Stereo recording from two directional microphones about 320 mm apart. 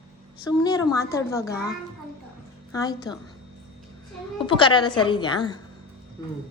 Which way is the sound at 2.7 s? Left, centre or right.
Centre.